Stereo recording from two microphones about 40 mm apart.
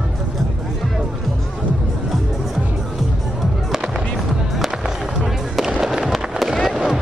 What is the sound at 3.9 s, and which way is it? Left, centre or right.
Music, centre.